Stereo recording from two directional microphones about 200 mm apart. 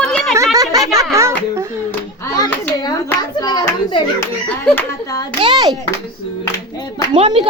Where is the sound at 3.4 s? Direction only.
20° left (ahead or behind).